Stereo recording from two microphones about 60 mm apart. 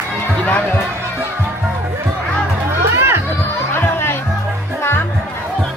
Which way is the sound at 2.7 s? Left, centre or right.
Right.